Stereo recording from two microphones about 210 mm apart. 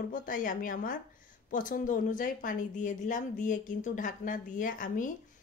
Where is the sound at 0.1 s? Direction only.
40° left (ahead or behind).